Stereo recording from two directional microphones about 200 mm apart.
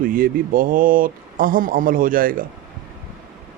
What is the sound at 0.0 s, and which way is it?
Speech, 45° right (ahead or behind).